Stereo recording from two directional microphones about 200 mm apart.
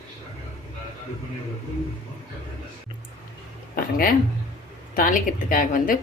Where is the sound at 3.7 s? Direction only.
45° left (ahead or behind).